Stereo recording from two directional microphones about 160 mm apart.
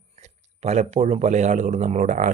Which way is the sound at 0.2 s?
45° right (ahead or behind).